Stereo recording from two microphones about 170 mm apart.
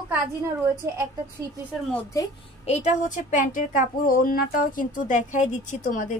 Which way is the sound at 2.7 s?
45° left (ahead or behind).